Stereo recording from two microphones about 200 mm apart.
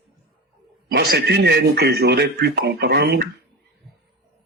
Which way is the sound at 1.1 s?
55° right (ahead or behind).